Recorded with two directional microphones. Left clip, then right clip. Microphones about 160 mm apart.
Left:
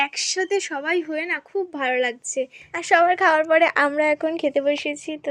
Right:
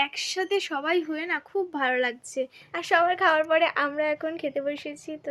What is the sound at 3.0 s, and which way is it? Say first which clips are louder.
A woman's voice: left 5 dB; 40° left (ahead or behind).